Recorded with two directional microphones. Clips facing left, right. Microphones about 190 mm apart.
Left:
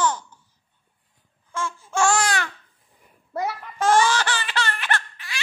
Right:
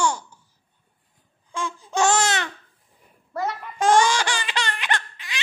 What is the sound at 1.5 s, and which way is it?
Babbling, 15° right (ahead or behind).